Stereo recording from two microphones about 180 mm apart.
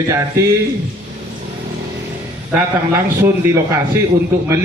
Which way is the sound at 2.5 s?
15° right (ahead or behind).